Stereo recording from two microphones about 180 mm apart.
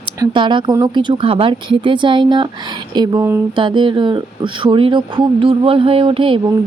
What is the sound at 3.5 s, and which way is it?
Speech, 25° right (ahead or behind).